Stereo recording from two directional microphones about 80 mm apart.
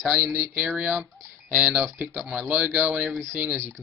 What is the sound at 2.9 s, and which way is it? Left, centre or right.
Speech, centre.